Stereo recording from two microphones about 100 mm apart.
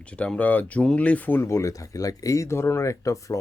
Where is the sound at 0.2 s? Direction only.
15° left (ahead or behind).